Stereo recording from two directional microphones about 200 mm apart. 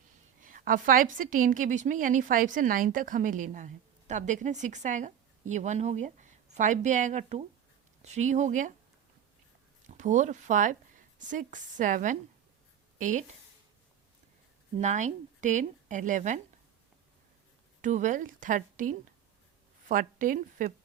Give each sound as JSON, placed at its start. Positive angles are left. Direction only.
{"t": 0.3, "sound": "a woman's voice", "side_deg": -40}
{"t": 9.9, "sound": "a woman's voice", "side_deg": -35}
{"t": 14.8, "sound": "a woman's voice", "side_deg": -35}
{"t": 17.8, "sound": "a woman's voice", "side_deg": -40}